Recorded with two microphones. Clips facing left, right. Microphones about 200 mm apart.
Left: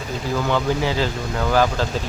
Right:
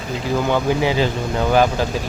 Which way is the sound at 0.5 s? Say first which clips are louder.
Right 3 dB; 15° right (ahead or behind).